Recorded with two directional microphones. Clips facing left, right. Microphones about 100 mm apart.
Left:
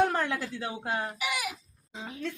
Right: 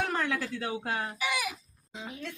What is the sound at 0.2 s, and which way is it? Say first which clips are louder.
Speech: even; 25° left (ahead or behind).